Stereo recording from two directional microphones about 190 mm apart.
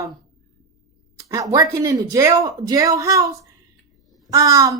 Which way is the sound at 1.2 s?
15° right (ahead or behind).